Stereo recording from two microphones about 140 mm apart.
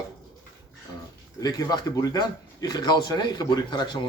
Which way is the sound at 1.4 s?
25° left (ahead or behind).